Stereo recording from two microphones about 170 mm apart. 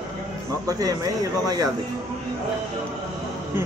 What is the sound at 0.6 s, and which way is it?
Speech, 20° right (ahead or behind).